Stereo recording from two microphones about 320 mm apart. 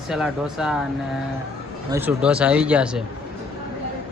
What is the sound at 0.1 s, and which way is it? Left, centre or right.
Speech, centre.